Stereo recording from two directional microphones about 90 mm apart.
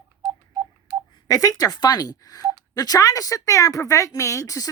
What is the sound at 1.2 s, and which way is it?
Speech, 40° left (ahead or behind).